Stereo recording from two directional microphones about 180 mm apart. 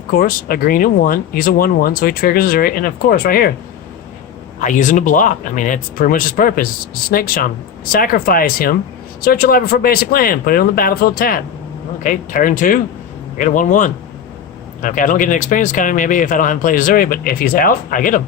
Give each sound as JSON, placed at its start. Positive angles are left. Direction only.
{"t": 0.1, "sound": "speech", "side_deg": 50}
{"t": 4.6, "sound": "speech", "side_deg": 45}